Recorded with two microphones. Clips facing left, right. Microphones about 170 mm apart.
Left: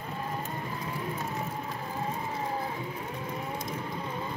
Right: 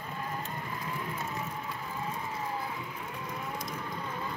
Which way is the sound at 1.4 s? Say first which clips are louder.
Left 3 dB; 35° left (ahead or behind).